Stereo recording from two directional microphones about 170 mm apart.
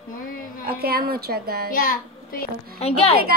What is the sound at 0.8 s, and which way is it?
Speech, 65° right (ahead or behind).